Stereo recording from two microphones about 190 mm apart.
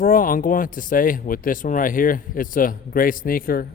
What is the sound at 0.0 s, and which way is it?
A man's voice, 45° left (ahead or behind).